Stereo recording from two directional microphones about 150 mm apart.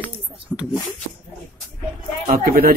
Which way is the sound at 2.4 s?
70° right (ahead or behind).